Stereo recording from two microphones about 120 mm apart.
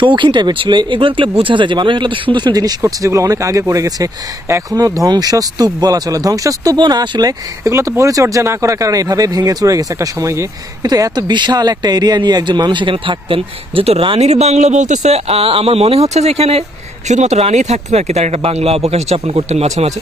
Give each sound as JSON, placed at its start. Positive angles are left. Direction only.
{"t": 0.0, "sound": "speech", "side_deg": -40}
{"t": 17.1, "sound": "speech", "side_deg": -70}